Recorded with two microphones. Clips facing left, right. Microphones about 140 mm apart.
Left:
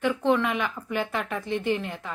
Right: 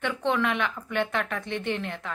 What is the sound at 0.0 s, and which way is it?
A woman's voice, 5° left (ahead or behind).